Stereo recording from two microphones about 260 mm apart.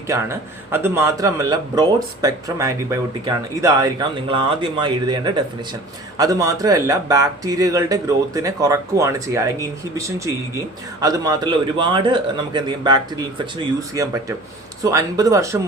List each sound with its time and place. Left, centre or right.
0.1 s speech: centre